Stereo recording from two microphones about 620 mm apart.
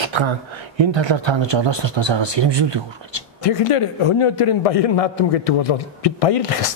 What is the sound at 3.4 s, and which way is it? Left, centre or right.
A man's voice, left.